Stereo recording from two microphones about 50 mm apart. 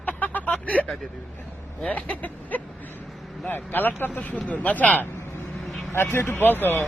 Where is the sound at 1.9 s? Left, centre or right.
Left.